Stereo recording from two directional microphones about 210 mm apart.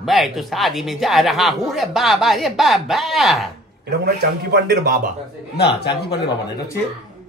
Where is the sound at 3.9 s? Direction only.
50° right (ahead or behind).